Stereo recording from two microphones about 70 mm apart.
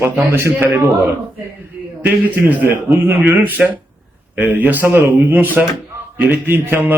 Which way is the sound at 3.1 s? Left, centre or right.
Right.